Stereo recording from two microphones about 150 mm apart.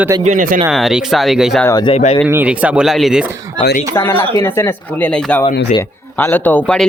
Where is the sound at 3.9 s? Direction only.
20° left (ahead or behind).